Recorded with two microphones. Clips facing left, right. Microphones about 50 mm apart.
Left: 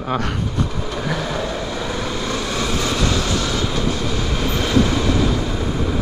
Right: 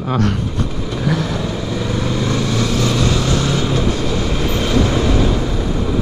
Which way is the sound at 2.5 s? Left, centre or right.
Centre.